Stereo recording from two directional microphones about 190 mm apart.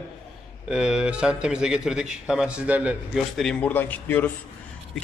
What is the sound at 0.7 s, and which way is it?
A man's voice, 5° right (ahead or behind).